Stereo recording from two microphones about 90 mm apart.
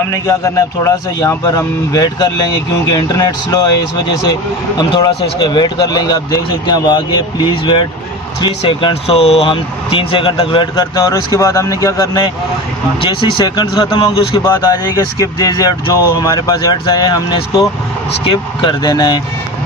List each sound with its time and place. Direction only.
0.4 s speech: 35° left (ahead or behind)
4.7 s speech: 55° left (ahead or behind)
8.4 s speech: 70° left (ahead or behind); by 11.3 s 50° left (ahead or behind)
11.3 s speech: 35° left (ahead or behind)
13.0 s speech: 55° left (ahead or behind)
14.1 s speech: 75° left (ahead or behind)
14.4 s speech: 45° left (ahead or behind)
18.2 s speech: 70° left (ahead or behind); by 19.2 s 50° left (ahead or behind)